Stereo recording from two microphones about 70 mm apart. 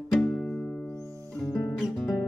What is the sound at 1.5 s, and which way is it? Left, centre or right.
Music, centre.